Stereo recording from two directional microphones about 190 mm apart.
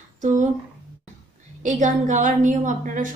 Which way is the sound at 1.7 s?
40° right (ahead or behind).